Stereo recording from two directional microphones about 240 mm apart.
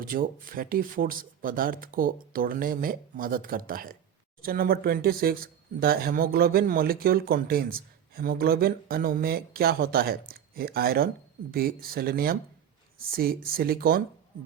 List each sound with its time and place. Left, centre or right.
0.0 s speech: right